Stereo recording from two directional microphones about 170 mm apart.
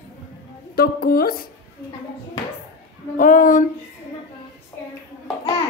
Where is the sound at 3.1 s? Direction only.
50° left (ahead or behind).